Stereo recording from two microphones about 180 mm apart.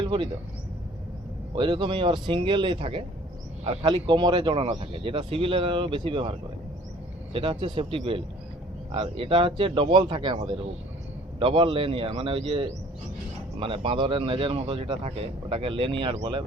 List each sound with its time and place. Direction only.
0.0 s speech: 25° right (ahead or behind)
1.5 s speech: 25° right (ahead or behind)
7.3 s speech: 30° right (ahead or behind)